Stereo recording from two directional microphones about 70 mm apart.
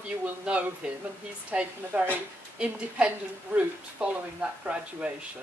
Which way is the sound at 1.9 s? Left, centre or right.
Right.